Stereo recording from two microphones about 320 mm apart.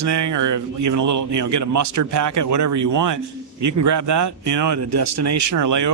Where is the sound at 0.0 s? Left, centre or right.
Right.